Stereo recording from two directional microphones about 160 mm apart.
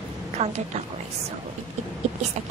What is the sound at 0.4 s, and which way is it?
Speech, 45° right (ahead or behind).